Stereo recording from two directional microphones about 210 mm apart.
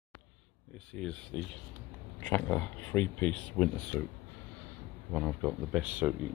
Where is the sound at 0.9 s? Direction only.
5° left (ahead or behind).